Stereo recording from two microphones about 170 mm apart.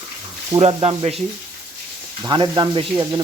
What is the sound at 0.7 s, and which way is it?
Sizzle, 30° right (ahead or behind).